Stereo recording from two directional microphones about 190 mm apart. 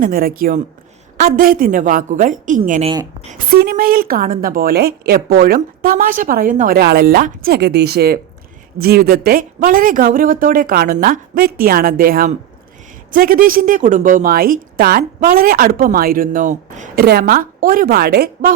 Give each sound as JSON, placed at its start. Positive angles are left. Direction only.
{"t": 0.0, "sound": "a woman's voice", "side_deg": -50}
{"t": 2.8, "sound": "speech", "side_deg": -20}
{"t": 3.5, "sound": "a woman's voice", "side_deg": -50}